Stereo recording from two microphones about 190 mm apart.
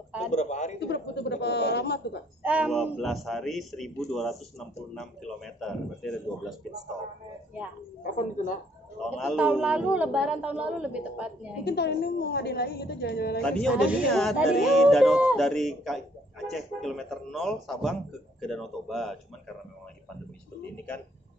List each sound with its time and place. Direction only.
0.3 s a man's voice: 35° left (ahead or behind)
0.7 s a woman's voice: 65° left (ahead or behind)
2.4 s speech: 5° right (ahead or behind)
8.0 s speech: 45° left (ahead or behind)
9.0 s a man's voice: centre (ahead or behind)
11.6 s a woman's voice: 60° left (ahead or behind)
13.4 s speech: 5° left (ahead or behind)
20.7 s a man's voice: 5° left (ahead or behind)